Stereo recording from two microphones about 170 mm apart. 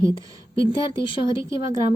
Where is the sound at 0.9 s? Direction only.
30° left (ahead or behind).